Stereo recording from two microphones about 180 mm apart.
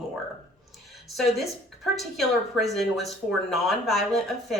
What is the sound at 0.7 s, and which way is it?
A woman's voice, centre (ahead or behind).